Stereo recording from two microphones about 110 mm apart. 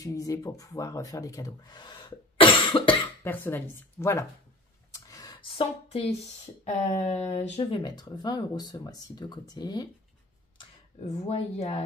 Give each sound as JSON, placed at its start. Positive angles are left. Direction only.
{"t": 0.0, "sound": "speech", "side_deg": 30}
{"t": 3.3, "sound": "speech", "side_deg": 20}
{"t": 4.9, "sound": "a sound", "side_deg": 30}
{"t": 5.5, "sound": "speech", "side_deg": 55}
{"t": 7.7, "sound": "speech", "side_deg": 40}
{"t": 11.0, "sound": "speech", "side_deg": 75}